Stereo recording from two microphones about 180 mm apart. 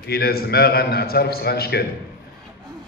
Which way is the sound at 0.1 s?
60° left (ahead or behind).